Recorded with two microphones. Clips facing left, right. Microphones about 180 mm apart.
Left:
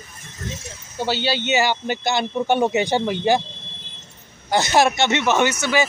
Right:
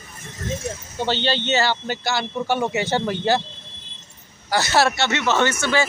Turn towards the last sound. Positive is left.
turn(degrees=10)  # may be behind; listen again after turning